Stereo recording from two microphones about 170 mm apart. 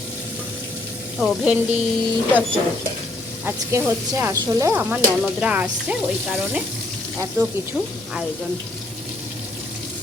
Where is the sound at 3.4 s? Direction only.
15° right (ahead or behind).